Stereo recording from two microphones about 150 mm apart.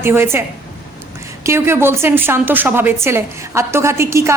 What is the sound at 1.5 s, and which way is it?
A woman's voice, 15° right (ahead or behind).